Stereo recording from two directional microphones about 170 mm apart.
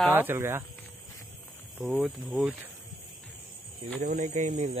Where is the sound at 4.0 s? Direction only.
45° right (ahead or behind).